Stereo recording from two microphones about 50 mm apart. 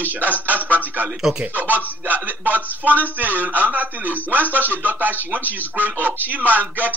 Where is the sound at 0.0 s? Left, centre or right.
Right.